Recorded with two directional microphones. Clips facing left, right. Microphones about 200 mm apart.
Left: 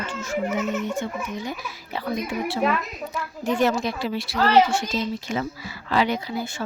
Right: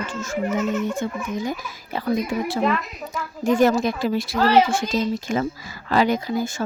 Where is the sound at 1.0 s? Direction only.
45° right (ahead or behind).